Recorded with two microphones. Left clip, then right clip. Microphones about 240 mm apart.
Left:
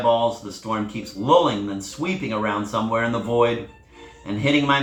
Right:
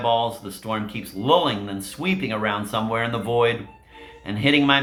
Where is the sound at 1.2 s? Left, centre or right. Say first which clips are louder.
Left 1 dB; right.